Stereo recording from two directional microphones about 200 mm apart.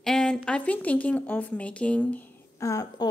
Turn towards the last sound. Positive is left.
turn(degrees=15)  # may be behind; listen again after turning